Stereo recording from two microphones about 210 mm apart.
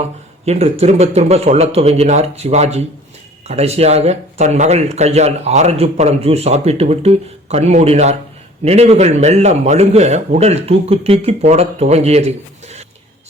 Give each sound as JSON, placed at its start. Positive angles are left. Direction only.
{"t": 0.0, "sound": "speech", "side_deg": -30}